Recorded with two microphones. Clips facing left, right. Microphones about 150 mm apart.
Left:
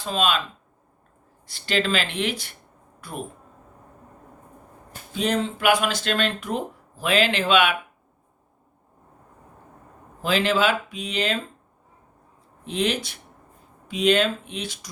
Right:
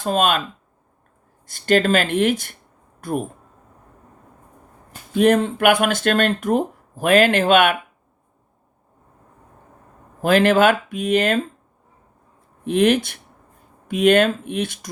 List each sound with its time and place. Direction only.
0.0 s speech: 50° right (ahead or behind)
1.5 s speech: 50° right (ahead or behind)
5.1 s speech: 55° right (ahead or behind)
10.2 s speech: 55° right (ahead or behind)
12.6 s speech: 55° right (ahead or behind)